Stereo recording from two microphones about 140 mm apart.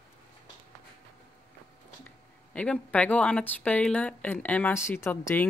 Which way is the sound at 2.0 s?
10° left (ahead or behind).